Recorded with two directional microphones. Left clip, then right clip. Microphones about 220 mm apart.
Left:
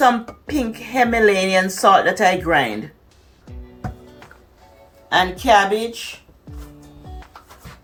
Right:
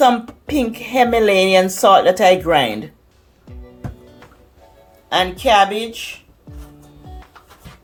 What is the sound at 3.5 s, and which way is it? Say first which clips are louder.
Music: even; centre (ahead or behind).